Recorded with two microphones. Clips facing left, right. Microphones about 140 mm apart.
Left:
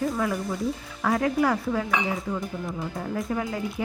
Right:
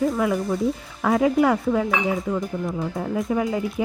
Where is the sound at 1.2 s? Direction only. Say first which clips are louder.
Right 6 dB; 20° right (ahead or behind).